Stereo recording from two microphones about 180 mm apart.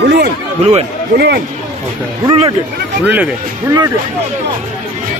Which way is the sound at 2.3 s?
25° right (ahead or behind).